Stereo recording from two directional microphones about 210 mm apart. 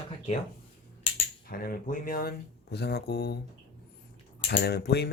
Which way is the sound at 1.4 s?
45° left (ahead or behind).